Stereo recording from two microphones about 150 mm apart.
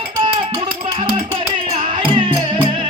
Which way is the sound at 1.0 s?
35° right (ahead or behind).